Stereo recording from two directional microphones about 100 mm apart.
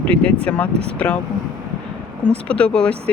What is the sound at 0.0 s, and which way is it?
Speech, 10° left (ahead or behind).